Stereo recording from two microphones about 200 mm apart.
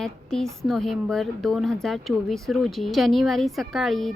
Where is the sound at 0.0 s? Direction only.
Centre (ahead or behind).